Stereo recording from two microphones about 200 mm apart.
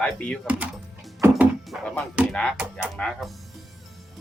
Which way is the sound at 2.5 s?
5° right (ahead or behind).